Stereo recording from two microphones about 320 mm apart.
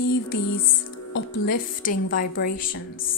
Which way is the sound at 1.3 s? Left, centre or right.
Left.